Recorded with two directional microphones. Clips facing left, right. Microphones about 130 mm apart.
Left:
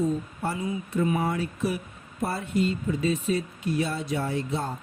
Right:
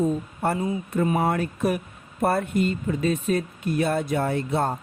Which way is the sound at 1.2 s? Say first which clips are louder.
Right 4 dB; 55° right (ahead or behind).